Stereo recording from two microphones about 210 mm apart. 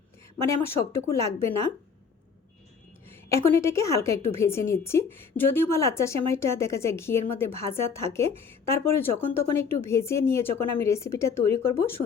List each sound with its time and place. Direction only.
0.5 s a woman's voice: 10° left (ahead or behind)
3.1 s a woman's voice: 10° left (ahead or behind)